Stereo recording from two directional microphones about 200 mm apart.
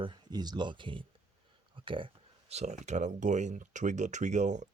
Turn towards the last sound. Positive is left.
turn(degrees=-35)  # may be behind; listen again after turning